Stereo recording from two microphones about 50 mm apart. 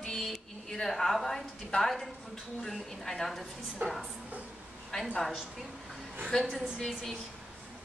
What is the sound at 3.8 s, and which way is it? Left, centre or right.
Speech, right.